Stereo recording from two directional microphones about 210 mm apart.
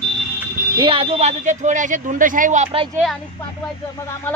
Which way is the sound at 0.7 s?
25° right (ahead or behind).